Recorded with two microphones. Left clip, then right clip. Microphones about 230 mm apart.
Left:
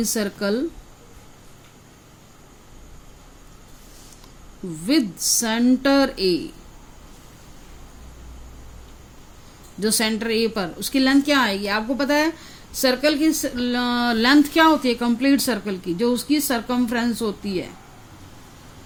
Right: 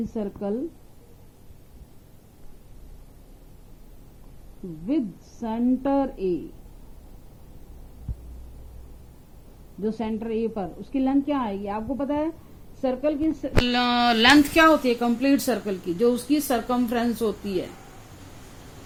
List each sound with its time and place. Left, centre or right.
0.1 s a woman's voice: left
4.9 s a woman's voice: left
9.8 s a woman's voice: left